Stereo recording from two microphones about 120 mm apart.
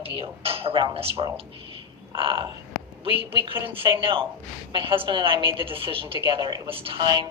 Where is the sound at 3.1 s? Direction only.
45° right (ahead or behind).